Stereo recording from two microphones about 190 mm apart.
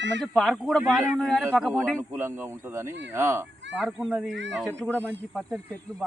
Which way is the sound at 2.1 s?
15° right (ahead or behind).